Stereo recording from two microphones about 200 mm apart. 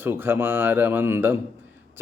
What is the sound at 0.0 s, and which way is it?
Speech, 10° right (ahead or behind).